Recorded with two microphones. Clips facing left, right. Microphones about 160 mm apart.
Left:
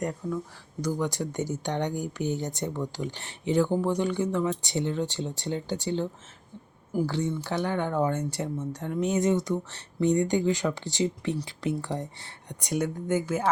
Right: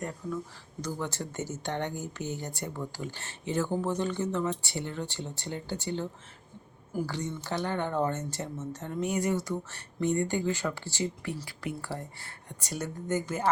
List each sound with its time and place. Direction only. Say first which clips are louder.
0.8 s speech: left 6 dB; 15° left (ahead or behind)
7.3 s speech: left 4 dB; 15° left (ahead or behind)